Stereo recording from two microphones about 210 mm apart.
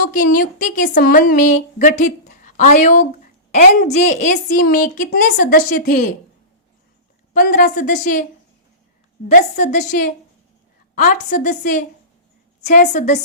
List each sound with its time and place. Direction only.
0.0 s a woman's voice: 40° left (ahead or behind)
7.3 s a woman's voice: 40° left (ahead or behind)
9.3 s a woman's voice: 35° left (ahead or behind)